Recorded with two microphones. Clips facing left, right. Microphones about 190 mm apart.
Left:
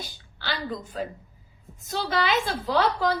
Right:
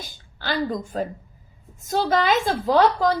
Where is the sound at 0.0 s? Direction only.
45° right (ahead or behind).